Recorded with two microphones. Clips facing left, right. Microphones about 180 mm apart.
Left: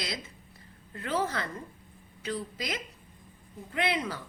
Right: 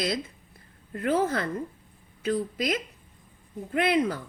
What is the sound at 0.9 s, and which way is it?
A woman's voice, 50° right (ahead or behind).